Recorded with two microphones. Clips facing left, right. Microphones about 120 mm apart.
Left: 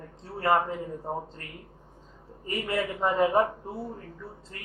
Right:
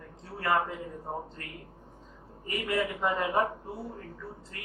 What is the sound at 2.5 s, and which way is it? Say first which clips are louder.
Speech: left 1 dB; 30° left (ahead or behind).